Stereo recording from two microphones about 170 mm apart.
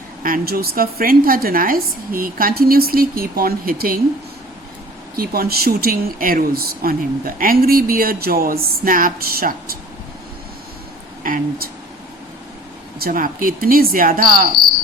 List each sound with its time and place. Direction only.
0.2 s speech: 55° right (ahead or behind)
5.1 s speech: 60° right (ahead or behind)
11.2 s speech: 60° right (ahead or behind)
13.0 s speech: 55° right (ahead or behind)